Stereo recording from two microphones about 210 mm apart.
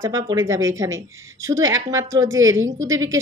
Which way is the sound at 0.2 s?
15° right (ahead or behind).